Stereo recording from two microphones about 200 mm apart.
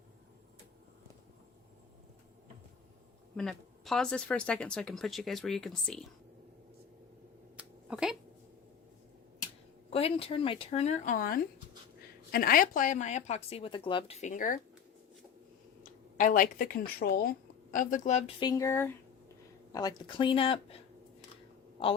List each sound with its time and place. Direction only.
3.3 s speech: centre (ahead or behind)
7.5 s a sound: 5° right (ahead or behind)
9.9 s speech: 30° left (ahead or behind)
15.8 s speech: 40° left (ahead or behind)
18.3 s a sound: 20° left (ahead or behind)
19.7 s speech: 20° left (ahead or behind)